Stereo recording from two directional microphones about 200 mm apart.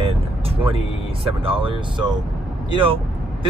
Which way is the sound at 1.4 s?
25° right (ahead or behind).